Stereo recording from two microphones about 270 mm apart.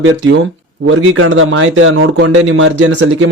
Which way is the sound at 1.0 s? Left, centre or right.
Right.